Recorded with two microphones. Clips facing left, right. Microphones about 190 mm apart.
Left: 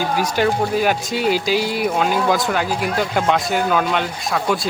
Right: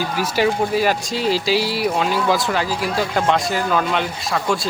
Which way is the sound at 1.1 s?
60° left (ahead or behind).